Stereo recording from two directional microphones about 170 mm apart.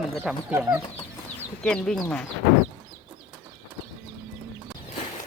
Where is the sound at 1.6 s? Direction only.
5° left (ahead or behind).